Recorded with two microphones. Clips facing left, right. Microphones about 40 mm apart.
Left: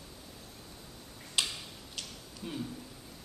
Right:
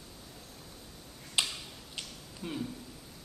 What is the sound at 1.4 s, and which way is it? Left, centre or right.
Tick-tock, right.